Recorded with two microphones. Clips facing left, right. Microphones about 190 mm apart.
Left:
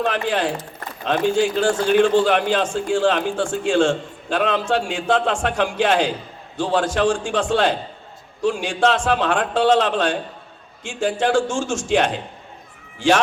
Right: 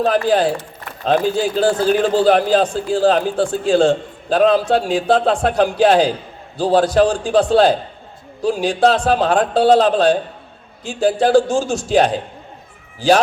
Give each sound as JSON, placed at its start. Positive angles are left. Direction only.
{"t": 0.0, "sound": "a man's voice", "side_deg": -35}